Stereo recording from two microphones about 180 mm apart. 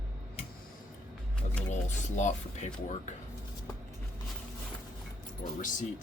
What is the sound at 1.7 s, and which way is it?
Speech, 40° left (ahead or behind).